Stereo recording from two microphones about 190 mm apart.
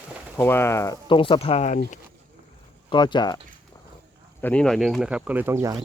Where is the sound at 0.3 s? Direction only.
10° left (ahead or behind).